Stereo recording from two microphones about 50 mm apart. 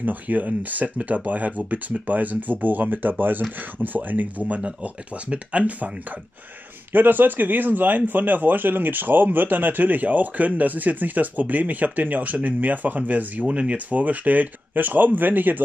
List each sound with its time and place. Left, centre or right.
0.0 s a man's voice: right
6.9 s a man's voice: right